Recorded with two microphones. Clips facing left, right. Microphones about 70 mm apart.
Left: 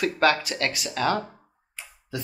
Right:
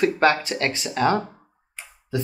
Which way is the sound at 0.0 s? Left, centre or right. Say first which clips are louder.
Right 3 dB; right.